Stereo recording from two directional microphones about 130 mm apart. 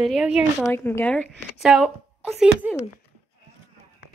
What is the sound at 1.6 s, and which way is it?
Speech, 5° right (ahead or behind).